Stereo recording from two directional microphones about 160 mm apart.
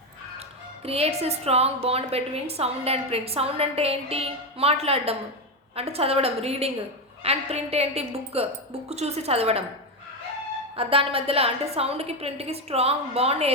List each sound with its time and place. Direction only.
0.9 s a woman's voice: 40° right (ahead or behind)
10.8 s a woman's voice: 35° right (ahead or behind)